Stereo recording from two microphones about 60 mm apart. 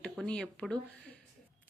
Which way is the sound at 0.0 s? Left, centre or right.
Centre.